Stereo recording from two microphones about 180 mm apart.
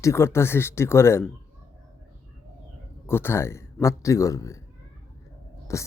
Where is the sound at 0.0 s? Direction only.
15° left (ahead or behind).